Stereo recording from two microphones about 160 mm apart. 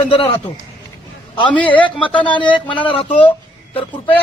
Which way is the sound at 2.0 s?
30° left (ahead or behind).